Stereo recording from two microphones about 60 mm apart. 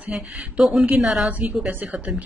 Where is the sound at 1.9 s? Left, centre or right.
Right.